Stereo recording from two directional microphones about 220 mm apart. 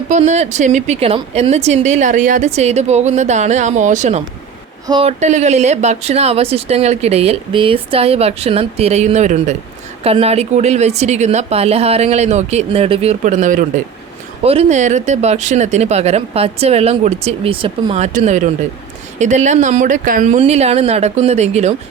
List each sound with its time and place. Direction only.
0.1 s speech: 30° right (ahead or behind)